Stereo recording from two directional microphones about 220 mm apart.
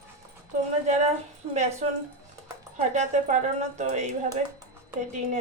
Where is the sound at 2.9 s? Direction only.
35° right (ahead or behind).